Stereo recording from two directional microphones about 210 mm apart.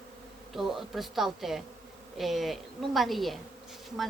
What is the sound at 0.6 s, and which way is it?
Speech, centre (ahead or behind).